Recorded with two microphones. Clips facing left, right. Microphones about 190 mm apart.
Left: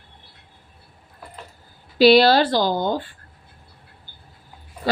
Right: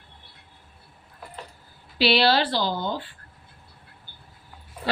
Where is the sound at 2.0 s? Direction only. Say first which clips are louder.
Left 8 dB; 45° left (ahead or behind).